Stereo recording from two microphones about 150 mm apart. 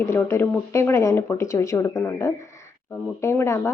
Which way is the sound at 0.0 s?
15° left (ahead or behind).